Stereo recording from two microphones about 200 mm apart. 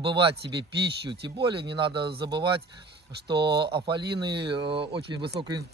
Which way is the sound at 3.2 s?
20° right (ahead or behind).